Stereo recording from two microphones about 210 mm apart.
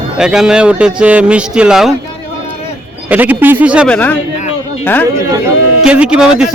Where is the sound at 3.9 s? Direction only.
5° left (ahead or behind).